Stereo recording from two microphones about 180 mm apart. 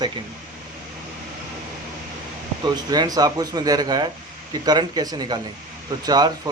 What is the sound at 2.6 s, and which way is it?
Speech, 20° right (ahead or behind).